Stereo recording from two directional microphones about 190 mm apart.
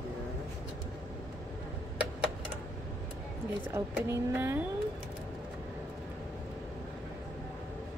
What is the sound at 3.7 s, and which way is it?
Speech, 15° right (ahead or behind).